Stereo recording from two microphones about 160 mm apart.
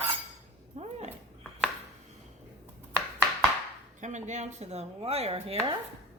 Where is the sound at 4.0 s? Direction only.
50° right (ahead or behind).